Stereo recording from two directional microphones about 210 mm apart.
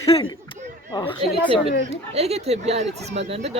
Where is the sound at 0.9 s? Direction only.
20° left (ahead or behind).